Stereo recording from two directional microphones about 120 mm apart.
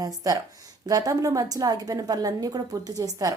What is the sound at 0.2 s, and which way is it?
A woman's voice, 30° right (ahead or behind).